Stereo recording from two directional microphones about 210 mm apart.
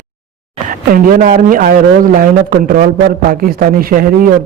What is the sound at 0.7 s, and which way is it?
A man's voice, 40° right (ahead or behind).